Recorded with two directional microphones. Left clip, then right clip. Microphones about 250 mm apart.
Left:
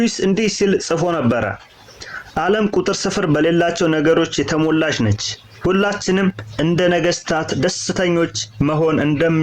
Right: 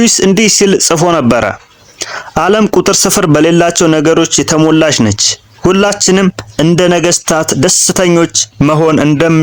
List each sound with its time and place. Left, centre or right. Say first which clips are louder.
0.0 s speech: right 9 dB; right